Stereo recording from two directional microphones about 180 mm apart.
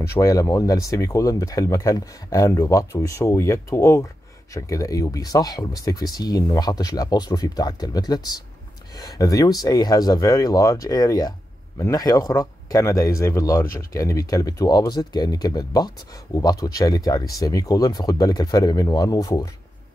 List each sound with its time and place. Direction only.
0.0 s speech: 15° left (ahead or behind)